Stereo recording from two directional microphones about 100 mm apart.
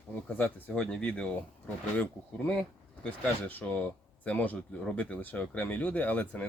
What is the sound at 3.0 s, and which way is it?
Speech, 15° left (ahead or behind).